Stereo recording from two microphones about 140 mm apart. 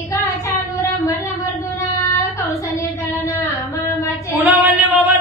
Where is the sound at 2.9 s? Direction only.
15° left (ahead or behind).